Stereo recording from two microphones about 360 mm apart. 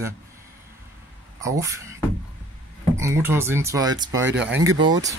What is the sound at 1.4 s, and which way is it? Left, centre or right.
Speech, centre.